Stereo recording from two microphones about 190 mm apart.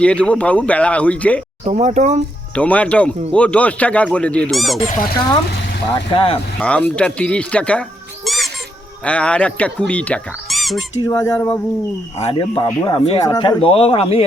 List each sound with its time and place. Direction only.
0.0 s speech: 5° left (ahead or behind)
1.6 s speech: 40° right (ahead or behind)
2.6 s speech: 5° left (ahead or behind)
4.9 s speech: 45° left (ahead or behind)
5.9 s speech: 30° left (ahead or behind)
6.6 s speech: 5° left (ahead or behind)
12.2 s speech: 30° left (ahead or behind)